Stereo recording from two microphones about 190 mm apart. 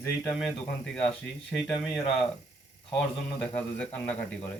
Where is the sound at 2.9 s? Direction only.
5° left (ahead or behind).